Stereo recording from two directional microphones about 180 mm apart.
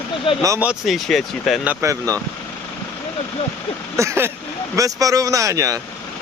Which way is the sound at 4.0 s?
15° right (ahead or behind).